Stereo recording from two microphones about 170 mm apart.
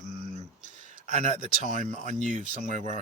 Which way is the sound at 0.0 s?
45° right (ahead or behind).